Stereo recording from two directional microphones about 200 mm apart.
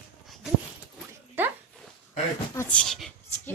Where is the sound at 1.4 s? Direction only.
10° right (ahead or behind).